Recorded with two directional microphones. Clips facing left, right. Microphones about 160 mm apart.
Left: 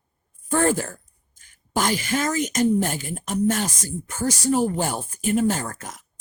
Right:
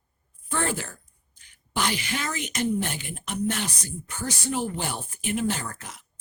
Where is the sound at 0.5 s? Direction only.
45° left (ahead or behind).